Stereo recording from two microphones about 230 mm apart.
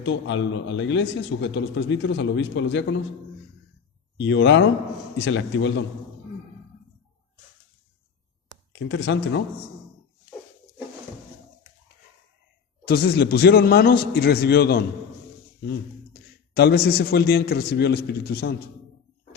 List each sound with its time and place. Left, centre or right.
0.0 s a man's voice: left
4.2 s a man's voice: left
8.7 s a man's voice: left
12.9 s a man's voice: left
16.6 s a man's voice: left